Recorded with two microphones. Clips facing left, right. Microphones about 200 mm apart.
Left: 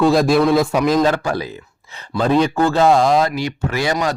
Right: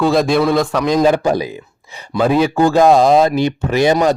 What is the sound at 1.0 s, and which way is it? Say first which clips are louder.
Speech: right 4 dB; 15° right (ahead or behind).